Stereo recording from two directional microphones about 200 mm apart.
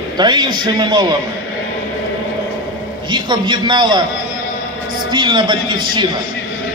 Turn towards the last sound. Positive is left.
turn(degrees=-25)  # may be behind; listen again after turning